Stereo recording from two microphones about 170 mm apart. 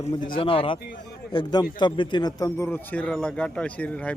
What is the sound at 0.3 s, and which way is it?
A man's voice, 30° left (ahead or behind).